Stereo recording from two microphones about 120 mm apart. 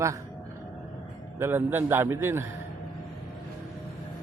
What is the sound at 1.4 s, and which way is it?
A man's voice, 15° right (ahead or behind).